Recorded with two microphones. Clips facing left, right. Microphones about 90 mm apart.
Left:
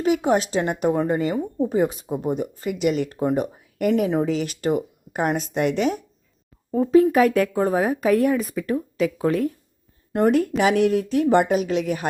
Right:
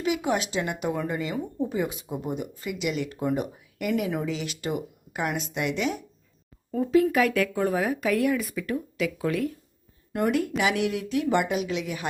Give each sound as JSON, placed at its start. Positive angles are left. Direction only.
{"t": 0.0, "sound": "a woman's voice", "side_deg": 40}